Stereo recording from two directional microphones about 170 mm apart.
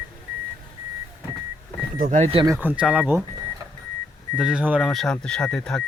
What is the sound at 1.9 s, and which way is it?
Speech, 50° right (ahead or behind).